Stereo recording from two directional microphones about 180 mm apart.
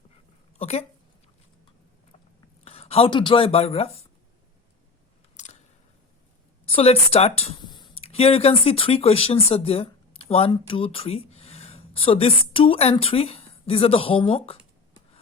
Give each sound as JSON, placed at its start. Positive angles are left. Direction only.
{"t": 0.6, "sound": "speech", "side_deg": 35}
{"t": 2.6, "sound": "speech", "side_deg": 35}
{"t": 5.4, "sound": "scissors", "side_deg": 40}
{"t": 6.7, "sound": "speech", "side_deg": 35}